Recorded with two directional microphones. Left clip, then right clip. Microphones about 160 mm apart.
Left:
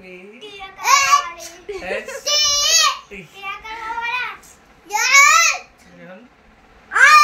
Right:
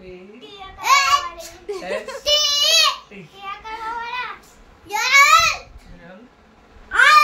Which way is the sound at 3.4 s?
55° left (ahead or behind).